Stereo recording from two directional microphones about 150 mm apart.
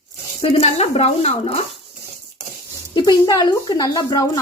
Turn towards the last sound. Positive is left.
turn(degrees=25)  # may be behind; listen again after turning